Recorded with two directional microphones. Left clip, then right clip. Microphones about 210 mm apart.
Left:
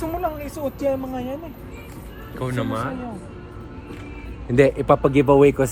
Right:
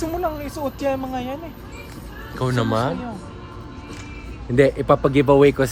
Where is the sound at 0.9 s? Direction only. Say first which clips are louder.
Even; 15° right (ahead or behind).